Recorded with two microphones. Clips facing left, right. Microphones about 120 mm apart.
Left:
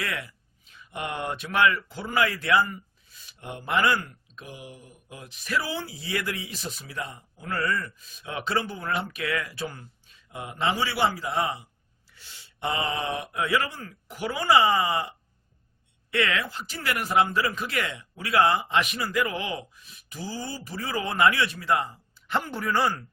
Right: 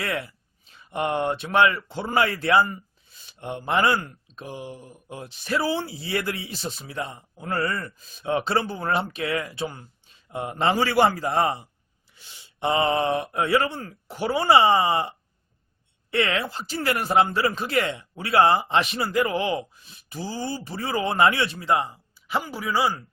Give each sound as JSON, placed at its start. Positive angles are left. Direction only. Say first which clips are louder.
{"t": 0.0, "sound": "speech", "louder": "right 4 dB", "side_deg": -35}
{"t": 12.1, "sound": "speech", "louder": "even", "side_deg": -15}
{"t": 16.1, "sound": "speech", "louder": "right 2 dB", "side_deg": -30}
{"t": 22.3, "sound": "speech", "louder": "right 1 dB", "side_deg": -5}